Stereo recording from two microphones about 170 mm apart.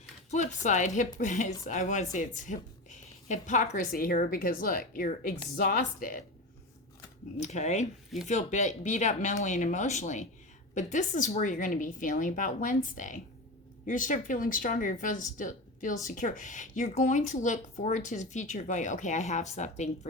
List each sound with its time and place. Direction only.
0.3 s speech: 45° left (ahead or behind)
7.3 s speech: 45° left (ahead or behind)